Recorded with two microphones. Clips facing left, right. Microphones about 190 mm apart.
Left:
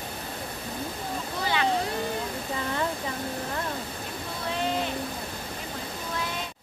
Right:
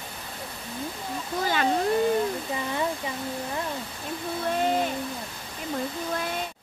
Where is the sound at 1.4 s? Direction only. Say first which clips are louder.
Right 1 dB; 45° right (ahead or behind).